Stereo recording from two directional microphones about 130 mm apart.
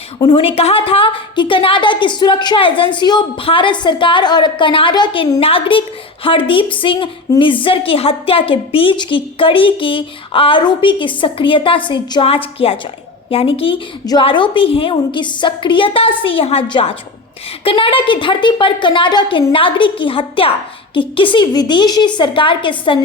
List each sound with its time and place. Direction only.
0.2 s a woman's voice: 45° left (ahead or behind)
14.0 s a woman's voice: 30° left (ahead or behind)
14.3 s a woman's voice: 40° left (ahead or behind)